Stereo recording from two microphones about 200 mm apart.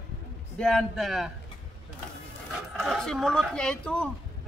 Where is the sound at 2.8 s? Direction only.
Centre (ahead or behind).